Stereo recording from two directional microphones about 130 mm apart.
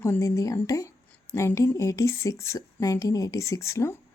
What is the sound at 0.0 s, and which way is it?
A woman's voice, 20° left (ahead or behind).